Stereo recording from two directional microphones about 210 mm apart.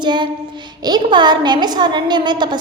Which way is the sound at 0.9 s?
20° right (ahead or behind).